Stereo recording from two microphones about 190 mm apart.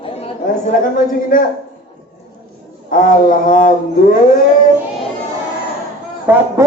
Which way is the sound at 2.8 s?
45° left (ahead or behind).